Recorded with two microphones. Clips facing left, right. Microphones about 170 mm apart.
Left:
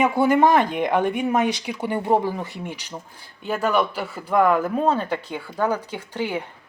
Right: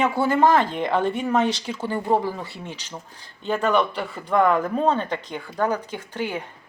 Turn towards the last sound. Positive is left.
turn(degrees=15)  # may be behind; listen again after turning